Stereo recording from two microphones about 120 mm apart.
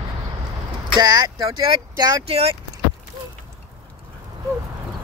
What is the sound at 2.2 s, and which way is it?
Speech, 55° right (ahead or behind).